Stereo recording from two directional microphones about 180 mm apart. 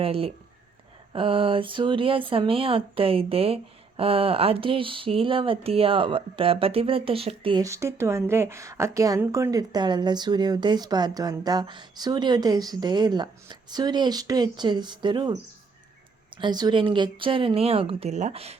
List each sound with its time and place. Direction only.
0.0 s speech: 30° right (ahead or behind)
7.6 s a woman's voice: 15° right (ahead or behind); by 18.5 s 35° right (ahead or behind)